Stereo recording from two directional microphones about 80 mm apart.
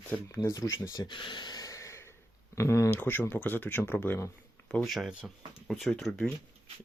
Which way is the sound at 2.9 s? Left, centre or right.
Left.